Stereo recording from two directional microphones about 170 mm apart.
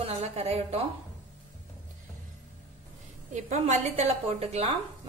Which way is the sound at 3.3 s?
45° right (ahead or behind).